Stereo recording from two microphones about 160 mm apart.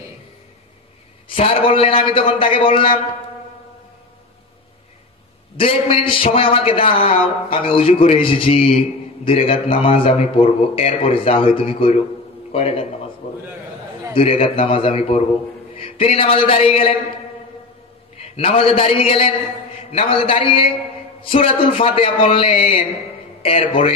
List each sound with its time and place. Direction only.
1.3 s a man's voice: 35° left (ahead or behind)
5.6 s a man's voice: 35° left (ahead or behind)
13.2 s a sound: 40° left (ahead or behind)
14.1 s a man's voice: 35° left (ahead or behind)
15.7 s a sound: 35° left (ahead or behind)
18.1 s a man's voice: 35° left (ahead or behind)